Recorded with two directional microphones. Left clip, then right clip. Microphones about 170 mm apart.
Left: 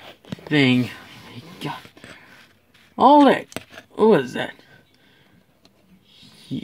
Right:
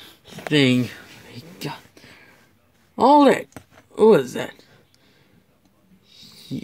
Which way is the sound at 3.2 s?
5° left (ahead or behind).